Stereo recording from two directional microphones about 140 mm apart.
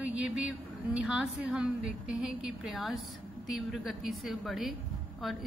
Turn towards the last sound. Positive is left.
turn(degrees=0)  # may be behind; listen again after turning